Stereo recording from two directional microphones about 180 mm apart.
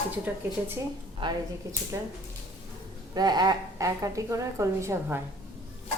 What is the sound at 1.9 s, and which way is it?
Speech, 15° right (ahead or behind).